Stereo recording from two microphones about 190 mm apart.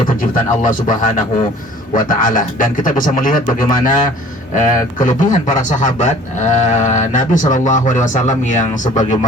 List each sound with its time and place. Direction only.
0.0 s a man's voice: 45° left (ahead or behind)